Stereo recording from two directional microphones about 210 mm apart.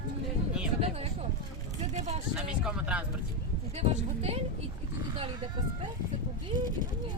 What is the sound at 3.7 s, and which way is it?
Speech, 30° right (ahead or behind).